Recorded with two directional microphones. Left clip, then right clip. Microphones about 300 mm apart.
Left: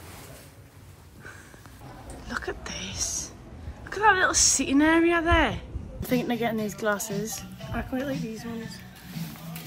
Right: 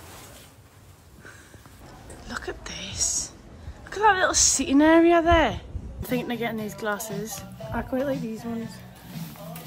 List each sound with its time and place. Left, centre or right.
2.2 s a woman's voice: centre
7.7 s speech: right